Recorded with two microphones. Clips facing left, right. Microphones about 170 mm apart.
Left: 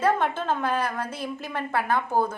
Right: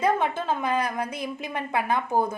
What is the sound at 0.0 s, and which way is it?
A woman's voice, 15° right (ahead or behind).